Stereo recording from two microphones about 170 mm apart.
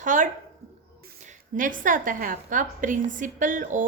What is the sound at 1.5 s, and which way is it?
A woman's voice, 50° right (ahead or behind).